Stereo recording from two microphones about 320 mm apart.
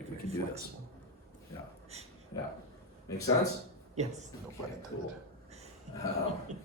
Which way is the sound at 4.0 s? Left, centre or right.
Right.